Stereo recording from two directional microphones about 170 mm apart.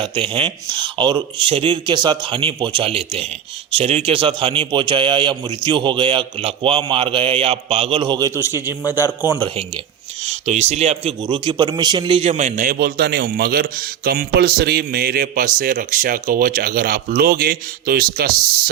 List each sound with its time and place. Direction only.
0.0 s a man's voice: 30° right (ahead or behind)
8.4 s a man's voice: 15° right (ahead or behind)
10.2 s a man's voice: 40° right (ahead or behind); by 18.3 s 60° right (ahead or behind)